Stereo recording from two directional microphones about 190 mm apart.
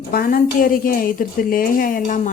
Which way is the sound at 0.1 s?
50° left (ahead or behind).